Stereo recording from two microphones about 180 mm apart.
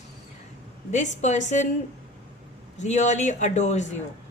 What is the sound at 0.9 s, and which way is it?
Speech, 40° left (ahead or behind).